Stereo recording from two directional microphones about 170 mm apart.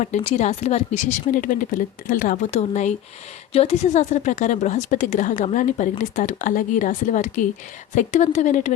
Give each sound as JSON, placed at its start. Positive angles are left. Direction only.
{"t": 0.0, "sound": "speech", "side_deg": 40}